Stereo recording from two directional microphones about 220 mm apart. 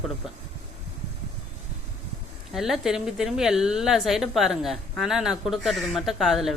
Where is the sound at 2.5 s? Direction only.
Centre (ahead or behind).